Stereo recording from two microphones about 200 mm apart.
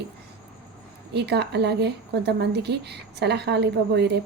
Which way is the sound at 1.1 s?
55° right (ahead or behind).